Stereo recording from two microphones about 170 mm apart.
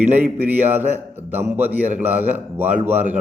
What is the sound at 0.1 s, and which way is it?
A man's voice, 10° right (ahead or behind).